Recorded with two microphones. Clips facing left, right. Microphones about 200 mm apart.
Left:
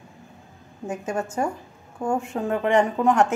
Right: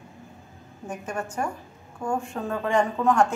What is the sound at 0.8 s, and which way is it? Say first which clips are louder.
A woman's voice: left 4 dB; 25° left (ahead or behind).